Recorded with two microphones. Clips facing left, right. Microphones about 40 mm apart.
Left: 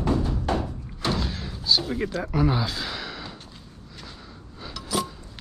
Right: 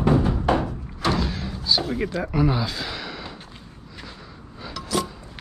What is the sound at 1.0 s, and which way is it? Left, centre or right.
Door, centre.